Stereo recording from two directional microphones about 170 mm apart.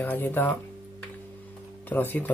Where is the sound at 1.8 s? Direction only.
10° left (ahead or behind).